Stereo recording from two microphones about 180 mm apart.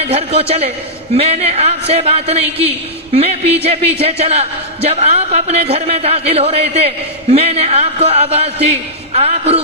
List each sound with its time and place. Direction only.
0.1 s a man's voice: 35° right (ahead or behind)